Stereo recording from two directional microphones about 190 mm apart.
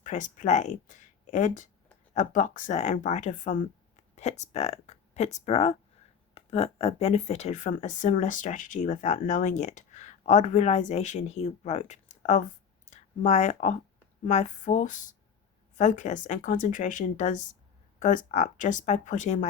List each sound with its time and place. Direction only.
0.0 s speech: 40° left (ahead or behind)